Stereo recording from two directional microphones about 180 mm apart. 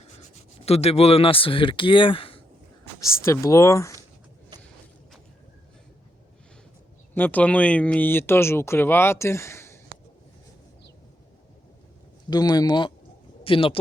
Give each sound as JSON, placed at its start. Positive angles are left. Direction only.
{"t": 0.6, "sound": "speech", "side_deg": 35}
{"t": 3.2, "sound": "speech", "side_deg": 15}
{"t": 7.1, "sound": "speech", "side_deg": 10}
{"t": 12.3, "sound": "speech", "side_deg": 20}